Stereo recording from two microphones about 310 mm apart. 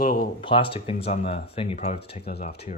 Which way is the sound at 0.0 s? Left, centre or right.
Left.